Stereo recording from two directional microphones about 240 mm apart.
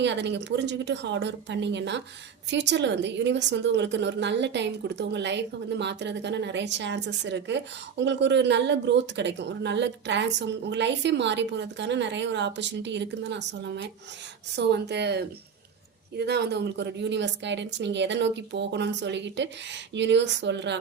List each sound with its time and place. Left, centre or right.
0.0 s a woman's voice: right